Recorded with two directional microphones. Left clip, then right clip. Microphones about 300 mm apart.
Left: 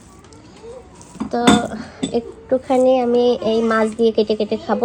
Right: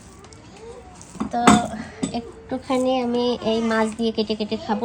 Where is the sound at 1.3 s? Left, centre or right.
Left.